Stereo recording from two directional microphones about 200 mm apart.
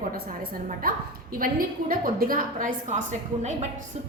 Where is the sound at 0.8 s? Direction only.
50° right (ahead or behind).